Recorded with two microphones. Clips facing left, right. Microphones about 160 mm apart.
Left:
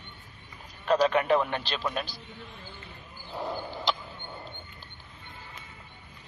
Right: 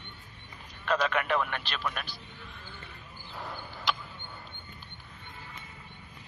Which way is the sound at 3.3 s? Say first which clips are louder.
Left 8 dB; 30° left (ahead or behind).